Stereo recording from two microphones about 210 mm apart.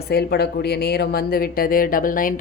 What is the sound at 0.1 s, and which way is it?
A woman's voice, 50° left (ahead or behind).